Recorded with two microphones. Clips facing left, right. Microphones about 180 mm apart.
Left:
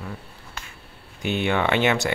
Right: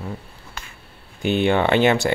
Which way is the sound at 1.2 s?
30° right (ahead or behind).